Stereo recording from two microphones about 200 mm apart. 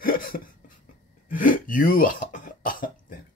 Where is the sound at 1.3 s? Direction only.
45° left (ahead or behind).